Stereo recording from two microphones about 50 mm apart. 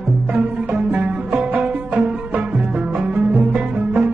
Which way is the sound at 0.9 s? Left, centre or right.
Right.